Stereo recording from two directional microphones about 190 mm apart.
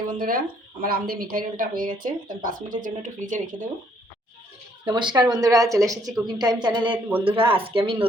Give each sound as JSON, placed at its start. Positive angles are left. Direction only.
{"t": 0.1, "sound": "speech", "side_deg": -50}
{"t": 4.9, "sound": "a woman's voice", "side_deg": -25}